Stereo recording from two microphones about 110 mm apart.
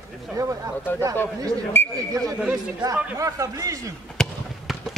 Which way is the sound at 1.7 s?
20° left (ahead or behind).